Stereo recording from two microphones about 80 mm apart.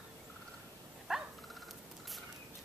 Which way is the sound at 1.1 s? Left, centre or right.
Centre.